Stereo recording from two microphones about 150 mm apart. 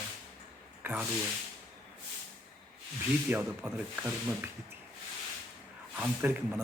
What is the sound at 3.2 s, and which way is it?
Speech, 10° right (ahead or behind).